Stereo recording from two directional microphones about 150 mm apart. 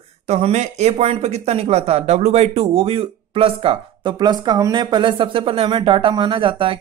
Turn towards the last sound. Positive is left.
turn(degrees=-35)  # may be behind; listen again after turning